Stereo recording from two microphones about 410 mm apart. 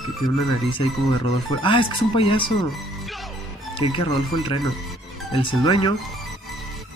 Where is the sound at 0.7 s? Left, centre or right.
Centre.